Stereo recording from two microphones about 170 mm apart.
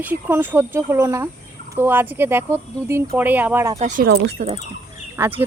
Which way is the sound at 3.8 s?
50° right (ahead or behind).